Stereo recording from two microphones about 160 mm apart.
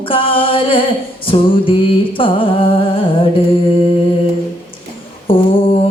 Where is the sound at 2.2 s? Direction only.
35° left (ahead or behind).